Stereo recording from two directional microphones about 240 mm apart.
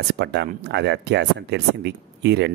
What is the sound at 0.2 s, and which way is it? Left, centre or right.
Speech, right.